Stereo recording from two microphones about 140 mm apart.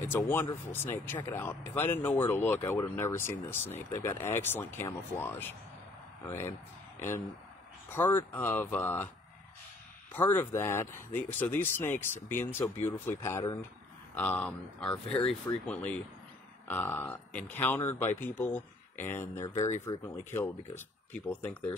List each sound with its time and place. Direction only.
0.0 s speech: 15° left (ahead or behind)
7.9 s speech: 15° left (ahead or behind)
10.1 s speech: 15° left (ahead or behind)
14.1 s speech: 10° left (ahead or behind)
15.2 s speech: 40° left (ahead or behind)
15.6 s speech: 10° left (ahead or behind)